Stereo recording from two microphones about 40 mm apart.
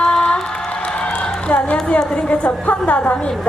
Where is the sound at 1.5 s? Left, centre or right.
Left.